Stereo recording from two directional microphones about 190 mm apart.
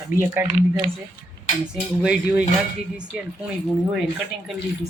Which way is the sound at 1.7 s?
5° right (ahead or behind).